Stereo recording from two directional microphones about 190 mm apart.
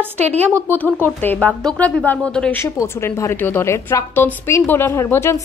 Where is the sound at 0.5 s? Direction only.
15° right (ahead or behind).